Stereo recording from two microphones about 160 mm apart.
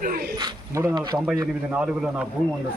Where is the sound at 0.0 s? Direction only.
60° right (ahead or behind).